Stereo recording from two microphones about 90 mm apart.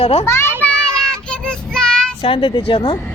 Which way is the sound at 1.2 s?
10° left (ahead or behind).